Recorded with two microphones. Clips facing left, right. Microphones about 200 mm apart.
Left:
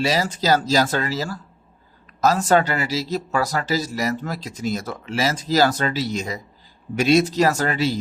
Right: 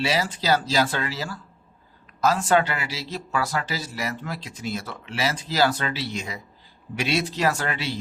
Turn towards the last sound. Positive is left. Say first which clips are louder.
# left 5 dB
turn(degrees=40)  # may be behind; listen again after turning